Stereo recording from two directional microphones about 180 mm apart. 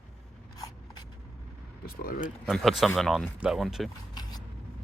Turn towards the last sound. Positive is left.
turn(degrees=25)  # may be behind; listen again after turning